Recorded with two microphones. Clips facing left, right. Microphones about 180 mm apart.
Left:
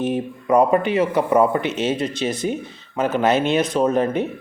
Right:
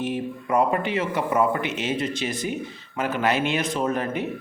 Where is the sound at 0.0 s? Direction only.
20° left (ahead or behind).